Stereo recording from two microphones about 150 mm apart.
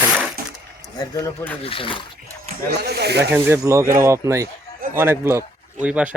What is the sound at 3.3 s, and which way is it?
Speech, 15° right (ahead or behind).